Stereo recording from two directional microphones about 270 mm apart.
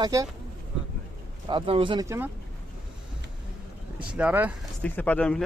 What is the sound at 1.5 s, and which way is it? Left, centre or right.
Speech, centre.